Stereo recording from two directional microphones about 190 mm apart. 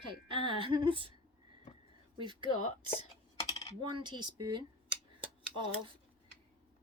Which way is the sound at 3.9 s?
25° right (ahead or behind).